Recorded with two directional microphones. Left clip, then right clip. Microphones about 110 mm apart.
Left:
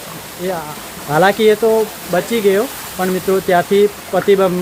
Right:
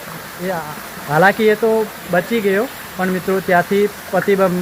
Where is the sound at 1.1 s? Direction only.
15° left (ahead or behind).